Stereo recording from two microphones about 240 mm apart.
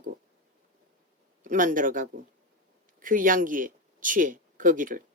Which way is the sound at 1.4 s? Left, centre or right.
Right.